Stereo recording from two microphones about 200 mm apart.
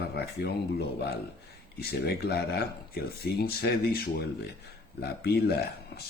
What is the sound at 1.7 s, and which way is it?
Speech, 50° left (ahead or behind).